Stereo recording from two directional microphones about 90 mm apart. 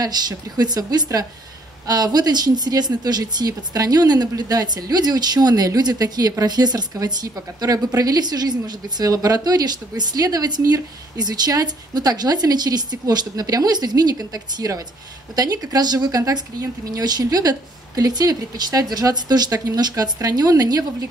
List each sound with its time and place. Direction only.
0.0 s a woman's voice: 45° right (ahead or behind)